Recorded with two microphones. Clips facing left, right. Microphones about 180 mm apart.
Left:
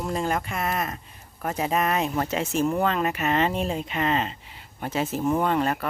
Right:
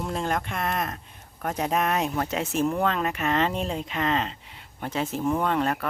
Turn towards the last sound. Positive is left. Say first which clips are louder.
# left 1 dB
turn(degrees=0)  # may be behind; listen again after turning